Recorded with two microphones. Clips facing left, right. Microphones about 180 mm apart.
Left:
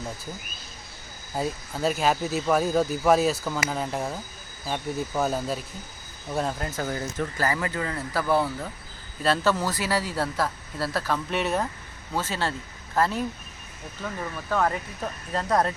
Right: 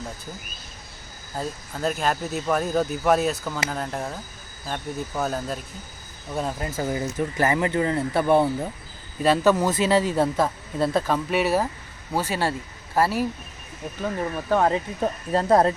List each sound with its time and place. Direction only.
1.4 s speech: 5° left (ahead or behind); by 11.2 s 20° right (ahead or behind)
11.3 s speech: 5° right (ahead or behind)
14.0 s speech: 20° right (ahead or behind)